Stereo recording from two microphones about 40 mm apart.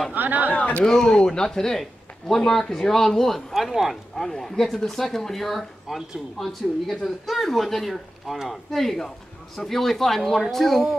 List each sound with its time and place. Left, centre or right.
0.1 s speech: right
0.5 s a sound: left
0.8 s speech: centre
4.2 s speech: centre